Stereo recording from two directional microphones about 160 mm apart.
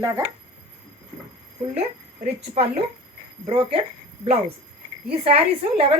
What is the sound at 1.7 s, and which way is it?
A woman's voice, 40° right (ahead or behind).